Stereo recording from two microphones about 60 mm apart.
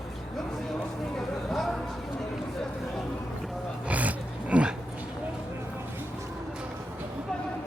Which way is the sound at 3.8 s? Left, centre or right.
Right.